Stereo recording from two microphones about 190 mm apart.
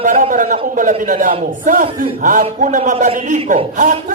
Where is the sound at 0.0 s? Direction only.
45° right (ahead or behind).